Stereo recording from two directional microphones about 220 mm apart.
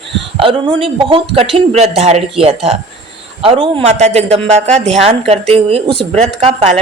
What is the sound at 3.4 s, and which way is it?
A man's voice, 25° right (ahead or behind).